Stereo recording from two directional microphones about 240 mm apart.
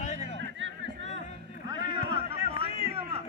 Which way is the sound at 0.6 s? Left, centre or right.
Right.